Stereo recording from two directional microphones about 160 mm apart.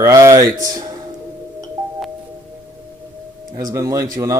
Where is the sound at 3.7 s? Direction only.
20° right (ahead or behind).